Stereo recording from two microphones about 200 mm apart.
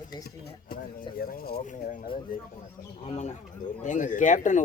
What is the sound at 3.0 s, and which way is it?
Bird, 35° left (ahead or behind).